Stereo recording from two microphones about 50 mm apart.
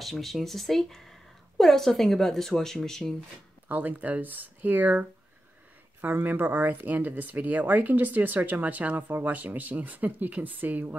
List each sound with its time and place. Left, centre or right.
0.0 s a woman's voice: centre
3.6 s speech: right
5.9 s speech: right